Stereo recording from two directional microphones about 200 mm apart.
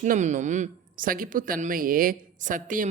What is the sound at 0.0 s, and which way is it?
Speech, 40° right (ahead or behind).